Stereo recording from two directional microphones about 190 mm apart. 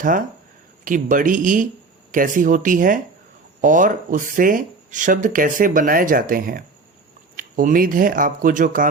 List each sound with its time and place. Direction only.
0.9 s speech: 45° right (ahead or behind)